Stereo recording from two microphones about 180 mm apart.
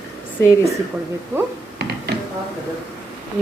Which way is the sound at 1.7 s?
65° right (ahead or behind).